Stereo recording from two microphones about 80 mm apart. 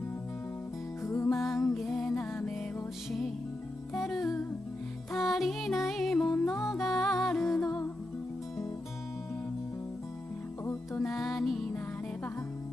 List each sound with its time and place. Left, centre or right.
1.0 s music: left
1.7 s music: centre
2.0 s music: centre
5.1 s music: centre
10.6 s music: left
11.1 s music: centre